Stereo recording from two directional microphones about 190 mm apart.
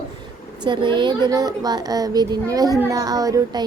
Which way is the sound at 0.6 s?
25° right (ahead or behind).